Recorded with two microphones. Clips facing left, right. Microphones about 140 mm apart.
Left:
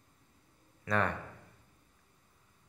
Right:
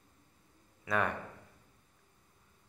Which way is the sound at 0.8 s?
5° right (ahead or behind).